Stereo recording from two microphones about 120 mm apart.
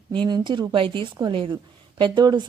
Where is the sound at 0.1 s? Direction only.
40° right (ahead or behind).